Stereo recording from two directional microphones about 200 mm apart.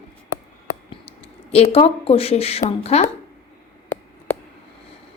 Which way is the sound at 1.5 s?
30° left (ahead or behind).